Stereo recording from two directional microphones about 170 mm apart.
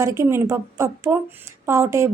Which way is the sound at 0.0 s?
15° right (ahead or behind).